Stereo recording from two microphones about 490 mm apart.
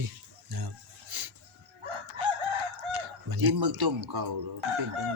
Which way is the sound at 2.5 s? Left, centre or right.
Right.